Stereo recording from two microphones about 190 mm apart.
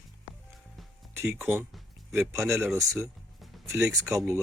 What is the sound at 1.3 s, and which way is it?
Speech, 10° right (ahead or behind).